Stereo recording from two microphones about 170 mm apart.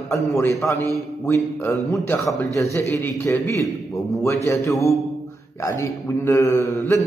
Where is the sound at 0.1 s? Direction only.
20° left (ahead or behind).